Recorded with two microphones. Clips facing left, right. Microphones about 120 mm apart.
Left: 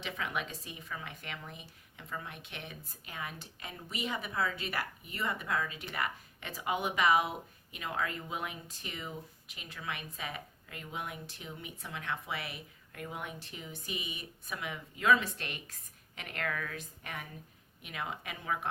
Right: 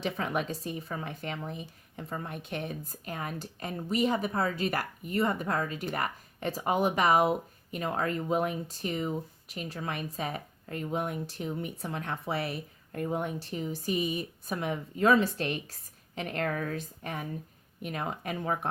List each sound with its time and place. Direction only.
0.0 s speech: 40° right (ahead or behind)